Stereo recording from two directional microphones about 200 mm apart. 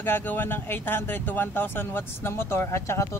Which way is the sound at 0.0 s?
10° left (ahead or behind).